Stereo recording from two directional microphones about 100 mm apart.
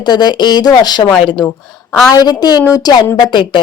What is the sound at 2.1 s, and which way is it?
Speech, 45° left (ahead or behind).